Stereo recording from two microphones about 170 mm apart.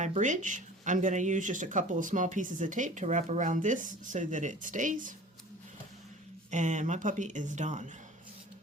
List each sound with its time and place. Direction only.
0.0 s speech: 45° right (ahead or behind)
6.5 s speech: 45° right (ahead or behind)